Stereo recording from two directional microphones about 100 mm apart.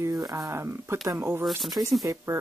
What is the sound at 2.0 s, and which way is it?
Speech, 30° right (ahead or behind).